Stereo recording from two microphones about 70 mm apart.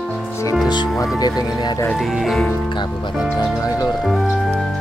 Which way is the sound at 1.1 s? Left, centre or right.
Left.